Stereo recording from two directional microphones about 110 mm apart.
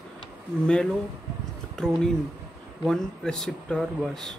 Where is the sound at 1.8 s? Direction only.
5° left (ahead or behind).